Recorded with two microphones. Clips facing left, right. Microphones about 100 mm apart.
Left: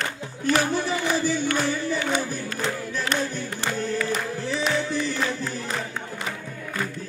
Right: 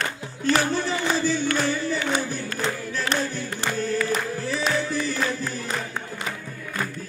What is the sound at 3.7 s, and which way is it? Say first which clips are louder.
Music: right 2 dB; 20° left (ahead or behind).